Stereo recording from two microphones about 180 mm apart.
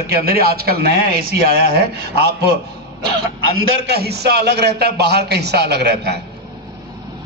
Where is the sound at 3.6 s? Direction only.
65° right (ahead or behind).